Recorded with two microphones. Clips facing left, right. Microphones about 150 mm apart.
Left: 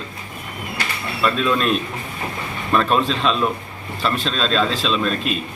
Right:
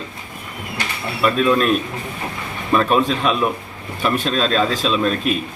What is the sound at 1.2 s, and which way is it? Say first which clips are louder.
Speech: right 3 dB; 5° right (ahead or behind).